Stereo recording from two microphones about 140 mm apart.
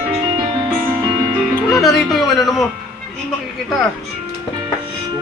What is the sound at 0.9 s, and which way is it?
Music, 20° right (ahead or behind).